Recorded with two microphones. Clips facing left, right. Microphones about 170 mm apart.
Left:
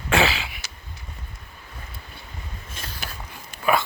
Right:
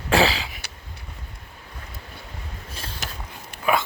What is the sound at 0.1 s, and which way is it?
Throat clearing, 35° right (ahead or behind).